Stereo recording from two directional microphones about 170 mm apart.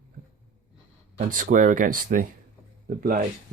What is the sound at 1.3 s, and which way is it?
Speech, 55° right (ahead or behind).